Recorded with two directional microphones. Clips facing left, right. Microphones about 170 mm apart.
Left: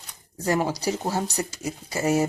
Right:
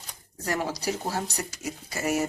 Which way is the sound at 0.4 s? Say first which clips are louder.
Left 5 dB; 25° left (ahead or behind).